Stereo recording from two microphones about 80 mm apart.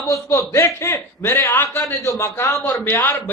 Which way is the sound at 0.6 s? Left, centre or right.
Left.